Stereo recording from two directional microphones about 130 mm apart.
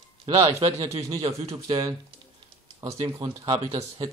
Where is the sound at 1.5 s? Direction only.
40° right (ahead or behind).